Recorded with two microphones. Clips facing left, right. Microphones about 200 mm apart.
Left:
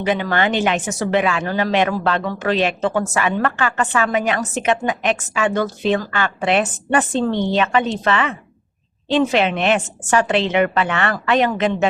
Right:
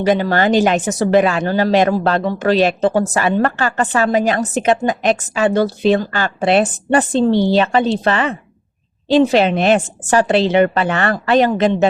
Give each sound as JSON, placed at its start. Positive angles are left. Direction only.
{"t": 0.0, "sound": "speech", "side_deg": -35}